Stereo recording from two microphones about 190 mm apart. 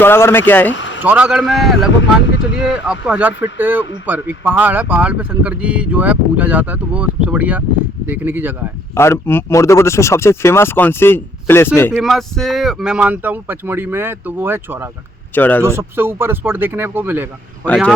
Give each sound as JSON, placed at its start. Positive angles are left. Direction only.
{"t": 0.0, "sound": "speech", "side_deg": 10}
{"t": 0.7, "sound": "a sound", "side_deg": 75}
{"t": 1.0, "sound": "a man's voice", "side_deg": -5}
{"t": 9.0, "sound": "speech", "side_deg": 10}
{"t": 11.9, "sound": "speech", "side_deg": 0}
{"t": 15.4, "sound": "speech", "side_deg": 10}
{"t": 15.6, "sound": "speech", "side_deg": -15}